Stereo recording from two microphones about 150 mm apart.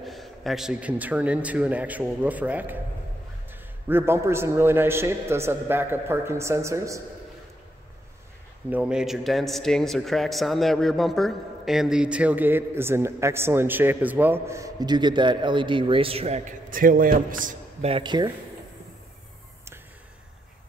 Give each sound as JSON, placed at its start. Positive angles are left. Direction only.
{"t": 0.0, "sound": "speech", "side_deg": 0}
{"t": 3.8, "sound": "speech", "side_deg": -15}
{"t": 8.6, "sound": "speech", "side_deg": -10}
{"t": 16.7, "sound": "a man's voice", "side_deg": -65}
{"t": 17.8, "sound": "speech", "side_deg": -35}